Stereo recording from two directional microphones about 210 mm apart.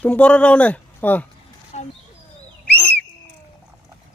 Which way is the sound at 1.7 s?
30° left (ahead or behind).